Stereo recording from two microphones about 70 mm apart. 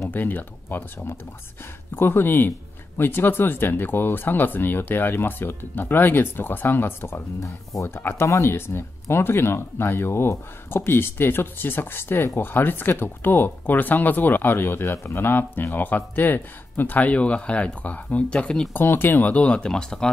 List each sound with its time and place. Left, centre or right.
0.1 s speech: left
18.7 s speech: left; by 20.1 s centre